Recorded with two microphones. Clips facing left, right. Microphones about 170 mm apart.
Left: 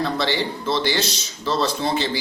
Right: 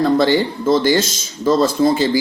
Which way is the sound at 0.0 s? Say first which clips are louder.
Right 9 dB; 45° right (ahead or behind).